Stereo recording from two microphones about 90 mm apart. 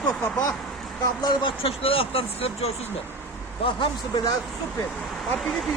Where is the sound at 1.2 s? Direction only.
60° left (ahead or behind); by 2.5 s 90° left.